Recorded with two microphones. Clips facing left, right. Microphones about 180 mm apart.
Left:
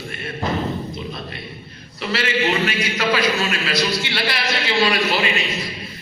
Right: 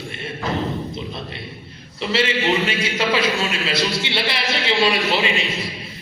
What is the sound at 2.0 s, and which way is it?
A man's voice, 25° right (ahead or behind).